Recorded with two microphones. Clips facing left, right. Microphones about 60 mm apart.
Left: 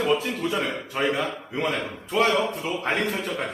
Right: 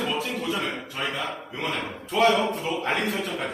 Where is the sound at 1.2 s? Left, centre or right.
Centre.